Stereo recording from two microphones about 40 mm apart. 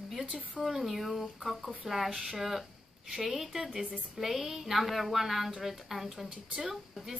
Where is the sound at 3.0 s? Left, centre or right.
Centre.